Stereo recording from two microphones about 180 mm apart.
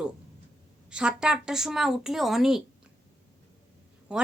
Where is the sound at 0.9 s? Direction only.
5° right (ahead or behind).